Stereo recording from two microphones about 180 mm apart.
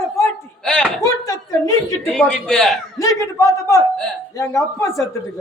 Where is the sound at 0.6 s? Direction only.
5° left (ahead or behind).